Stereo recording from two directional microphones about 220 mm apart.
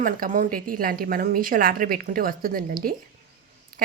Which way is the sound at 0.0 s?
40° right (ahead or behind).